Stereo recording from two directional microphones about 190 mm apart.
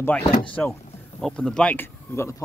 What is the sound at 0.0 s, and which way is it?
Speech, 10° left (ahead or behind).